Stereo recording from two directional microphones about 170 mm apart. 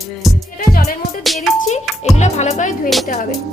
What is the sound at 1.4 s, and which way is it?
Music, 45° left (ahead or behind).